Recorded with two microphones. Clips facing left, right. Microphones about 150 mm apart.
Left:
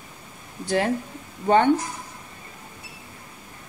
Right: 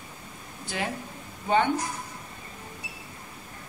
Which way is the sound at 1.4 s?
50° left (ahead or behind).